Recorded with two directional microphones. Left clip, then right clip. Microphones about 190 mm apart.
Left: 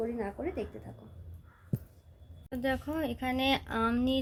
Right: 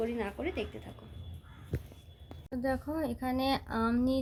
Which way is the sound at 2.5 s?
Centre (ahead or behind).